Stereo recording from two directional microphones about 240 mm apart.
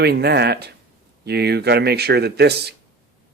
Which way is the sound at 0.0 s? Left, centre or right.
Right.